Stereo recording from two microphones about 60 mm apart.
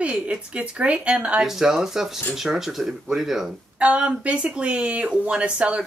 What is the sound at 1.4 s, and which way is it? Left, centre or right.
Speech, centre.